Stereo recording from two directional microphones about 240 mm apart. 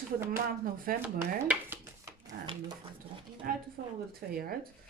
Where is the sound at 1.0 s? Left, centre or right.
Centre.